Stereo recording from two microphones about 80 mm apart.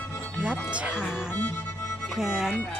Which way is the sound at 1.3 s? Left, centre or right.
Left.